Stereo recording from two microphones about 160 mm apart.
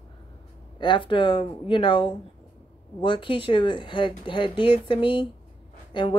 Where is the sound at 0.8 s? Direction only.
30° left (ahead or behind).